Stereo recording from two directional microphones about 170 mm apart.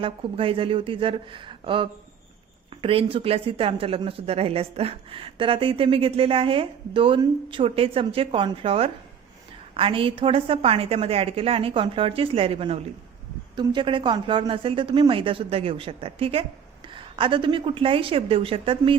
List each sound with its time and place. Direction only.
0.0 s speech: 30° right (ahead or behind)